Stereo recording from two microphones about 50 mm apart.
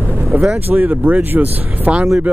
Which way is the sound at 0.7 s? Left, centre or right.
Right.